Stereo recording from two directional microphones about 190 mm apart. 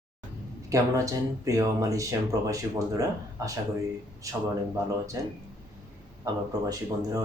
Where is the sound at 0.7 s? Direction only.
15° right (ahead or behind).